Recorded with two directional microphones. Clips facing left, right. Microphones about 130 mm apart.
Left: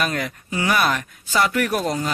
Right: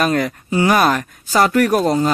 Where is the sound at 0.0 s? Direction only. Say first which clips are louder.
Right 7 dB; 40° right (ahead or behind).